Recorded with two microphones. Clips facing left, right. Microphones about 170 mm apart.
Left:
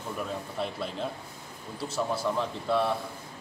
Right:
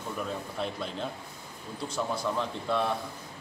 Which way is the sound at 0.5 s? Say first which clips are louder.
Left 2 dB; centre (ahead or behind).